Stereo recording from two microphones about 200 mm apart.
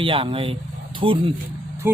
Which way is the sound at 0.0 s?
25° right (ahead or behind).